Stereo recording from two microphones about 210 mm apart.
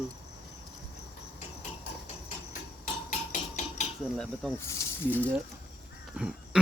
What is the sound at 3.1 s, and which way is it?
Hammer, 35° left (ahead or behind).